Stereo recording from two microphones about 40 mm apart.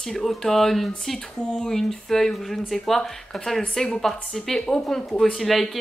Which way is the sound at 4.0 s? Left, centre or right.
Centre.